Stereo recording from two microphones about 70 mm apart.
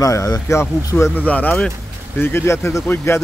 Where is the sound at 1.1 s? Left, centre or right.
Left.